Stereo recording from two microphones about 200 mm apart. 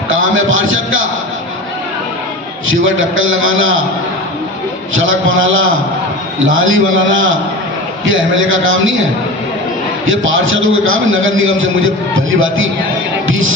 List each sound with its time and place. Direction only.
0.1 s a man's voice: 80° right
2.6 s a man's voice: 80° right
4.9 s a man's voice: 80° right
10.1 s a man's voice: 75° right (ahead or behind)